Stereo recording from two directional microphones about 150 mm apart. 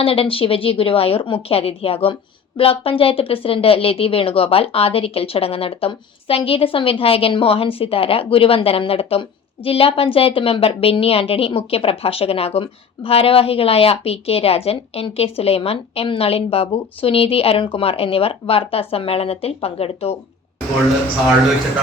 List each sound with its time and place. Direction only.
0.0 s a woman's voice: 40° left (ahead or behind)